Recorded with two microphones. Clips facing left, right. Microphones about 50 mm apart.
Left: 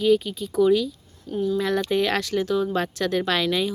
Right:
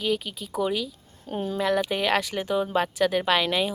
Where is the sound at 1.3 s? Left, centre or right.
Right.